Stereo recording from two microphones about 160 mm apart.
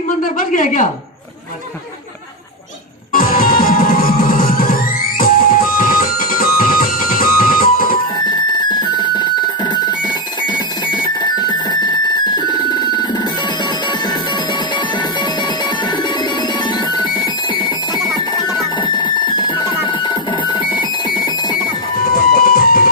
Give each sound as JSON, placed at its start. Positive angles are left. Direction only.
{"t": 0.2, "sound": "speech", "side_deg": 55}
{"t": 3.1, "sound": "music", "side_deg": 60}
{"t": 8.5, "sound": "music", "side_deg": 30}
{"t": 12.4, "sound": "telephone bell ringing", "side_deg": 25}
{"t": 16.9, "sound": "music", "side_deg": 25}
{"t": 18.9, "sound": "music", "side_deg": 30}
{"t": 22.4, "sound": "music", "side_deg": 65}